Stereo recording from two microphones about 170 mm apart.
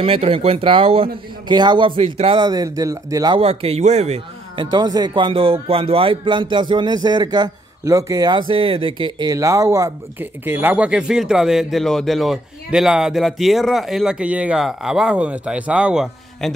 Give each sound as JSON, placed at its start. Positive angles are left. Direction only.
{"t": 0.0, "sound": "speech", "side_deg": -35}
{"t": 3.3, "sound": "speech", "side_deg": -35}
{"t": 4.6, "sound": "a man's voice", "side_deg": -25}